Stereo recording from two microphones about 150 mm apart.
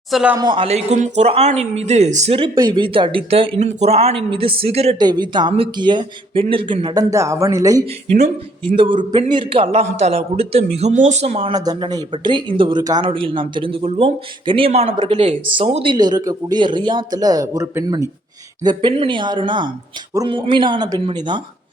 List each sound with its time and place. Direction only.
0.1 s speech: 5° right (ahead or behind)
0.3 s a man's voice: 30° right (ahead or behind)
2.6 s speech: 30° right (ahead or behind)
4.9 s speech: 25° right (ahead or behind)
8.7 s a man's voice: 35° right (ahead or behind)
11.5 s speech: 25° right (ahead or behind)